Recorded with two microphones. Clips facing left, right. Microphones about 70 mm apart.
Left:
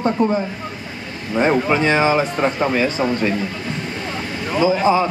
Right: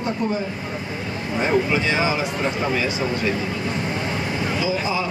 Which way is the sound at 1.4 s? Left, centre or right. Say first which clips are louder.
Left 4 dB; left.